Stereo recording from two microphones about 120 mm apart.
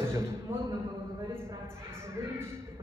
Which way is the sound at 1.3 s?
20° right (ahead or behind).